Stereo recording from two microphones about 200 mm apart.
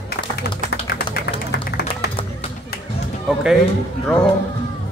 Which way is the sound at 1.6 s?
55° left (ahead or behind).